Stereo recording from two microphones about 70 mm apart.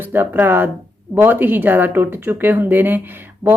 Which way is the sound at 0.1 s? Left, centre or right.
Right.